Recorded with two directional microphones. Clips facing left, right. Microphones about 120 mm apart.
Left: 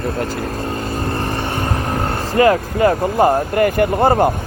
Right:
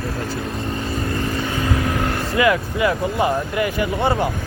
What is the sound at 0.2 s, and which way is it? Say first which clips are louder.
Vehicle: left 4 dB; 55° left (ahead or behind).